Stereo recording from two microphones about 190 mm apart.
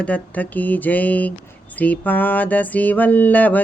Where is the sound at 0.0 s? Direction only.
10° left (ahead or behind).